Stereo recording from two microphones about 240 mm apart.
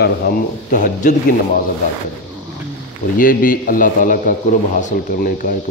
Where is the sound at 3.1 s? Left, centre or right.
Left.